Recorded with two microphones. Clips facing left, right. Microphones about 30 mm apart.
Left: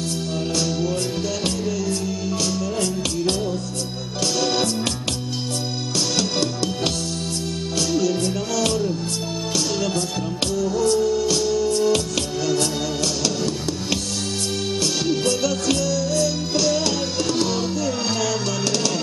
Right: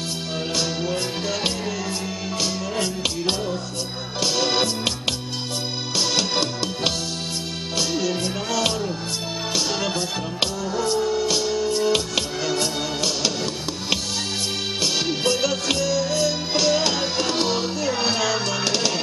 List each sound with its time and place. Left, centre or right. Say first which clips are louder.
0.6 s music: left 2 dB; right
4.2 s music: even; centre
6.1 s music: even; centre
7.9 s music: left 3 dB; centre